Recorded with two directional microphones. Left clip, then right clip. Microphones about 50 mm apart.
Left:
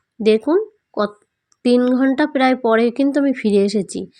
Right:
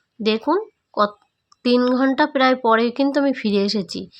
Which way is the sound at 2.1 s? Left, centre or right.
Left.